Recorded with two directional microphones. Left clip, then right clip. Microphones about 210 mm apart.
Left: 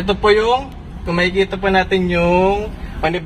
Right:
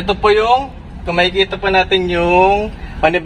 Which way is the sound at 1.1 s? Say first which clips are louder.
Right 3 dB; 30° right (ahead or behind).